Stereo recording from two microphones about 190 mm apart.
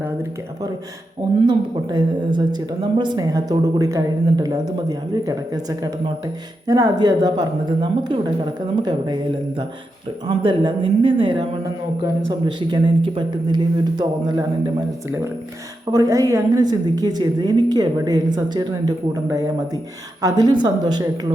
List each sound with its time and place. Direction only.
0.0 s speech: 10° right (ahead or behind)
1.5 s a woman's voice: 25° right (ahead or behind)
10.2 s a woman's voice: 25° right (ahead or behind)
15.9 s a woman's voice: 20° right (ahead or behind)